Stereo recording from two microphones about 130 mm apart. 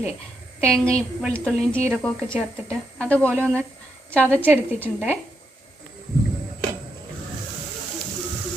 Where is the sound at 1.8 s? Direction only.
20° right (ahead or behind).